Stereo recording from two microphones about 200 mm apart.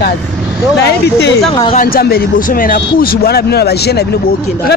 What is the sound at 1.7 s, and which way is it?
Speech, 50° left (ahead or behind).